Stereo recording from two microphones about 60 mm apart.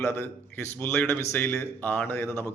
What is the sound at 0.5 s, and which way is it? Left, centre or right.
A man's voice, left.